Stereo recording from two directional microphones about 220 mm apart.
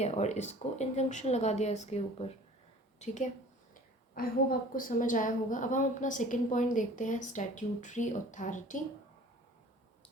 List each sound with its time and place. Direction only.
0.0 s a woman's voice: 30° left (ahead or behind)
4.1 s a woman's voice: 40° left (ahead or behind)